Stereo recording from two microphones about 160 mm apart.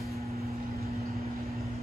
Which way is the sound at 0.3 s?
75° right (ahead or behind).